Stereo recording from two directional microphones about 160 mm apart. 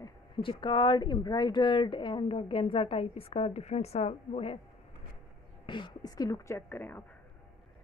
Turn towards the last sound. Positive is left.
turn(degrees=10)  # may be behind; listen again after turning